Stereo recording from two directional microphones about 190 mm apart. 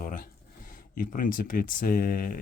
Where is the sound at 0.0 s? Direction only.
45° left (ahead or behind).